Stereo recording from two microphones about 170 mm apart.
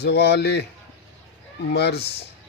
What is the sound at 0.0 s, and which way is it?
Speech, 80° left.